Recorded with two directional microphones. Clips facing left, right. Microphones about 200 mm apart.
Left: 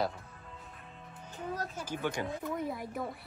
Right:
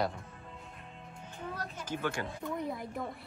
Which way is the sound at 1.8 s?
10° left (ahead or behind).